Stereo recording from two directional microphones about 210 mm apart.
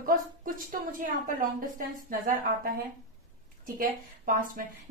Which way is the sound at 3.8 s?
45° right (ahead or behind).